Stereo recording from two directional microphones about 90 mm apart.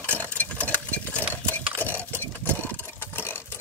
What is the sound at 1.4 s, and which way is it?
Cutlery, 20° left (ahead or behind).